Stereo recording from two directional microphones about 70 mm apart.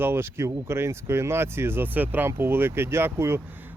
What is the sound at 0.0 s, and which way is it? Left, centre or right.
A man's voice, right.